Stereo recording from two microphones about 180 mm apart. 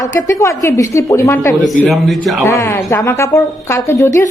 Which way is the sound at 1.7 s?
Centre (ahead or behind).